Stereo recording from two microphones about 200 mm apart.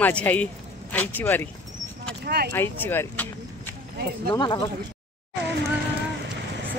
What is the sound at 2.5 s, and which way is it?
Speech, 10° left (ahead or behind).